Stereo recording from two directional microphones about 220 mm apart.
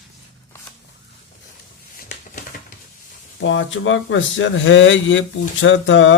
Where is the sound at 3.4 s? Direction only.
60° left (ahead or behind).